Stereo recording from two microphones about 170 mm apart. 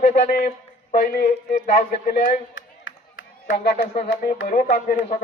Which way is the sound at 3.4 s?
65° left (ahead or behind).